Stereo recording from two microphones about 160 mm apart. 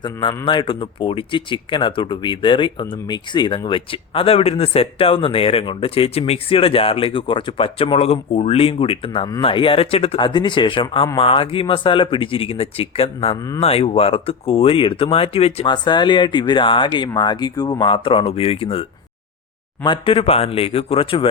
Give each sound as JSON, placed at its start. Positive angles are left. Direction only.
{"t": 0.0, "sound": "speech", "side_deg": 30}